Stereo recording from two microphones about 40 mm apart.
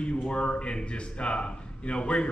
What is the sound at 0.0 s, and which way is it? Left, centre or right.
A man's voice, left.